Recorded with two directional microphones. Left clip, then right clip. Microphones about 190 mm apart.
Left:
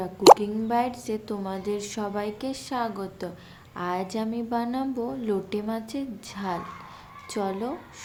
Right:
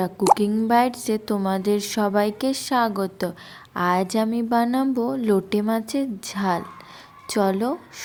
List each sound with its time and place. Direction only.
0.3 s speech: 45° right (ahead or behind)